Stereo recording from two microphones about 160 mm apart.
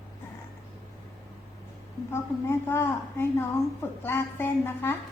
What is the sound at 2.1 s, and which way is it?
A woman's voice, 15° left (ahead or behind).